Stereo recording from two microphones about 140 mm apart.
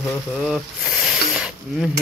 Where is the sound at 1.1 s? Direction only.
5° right (ahead or behind).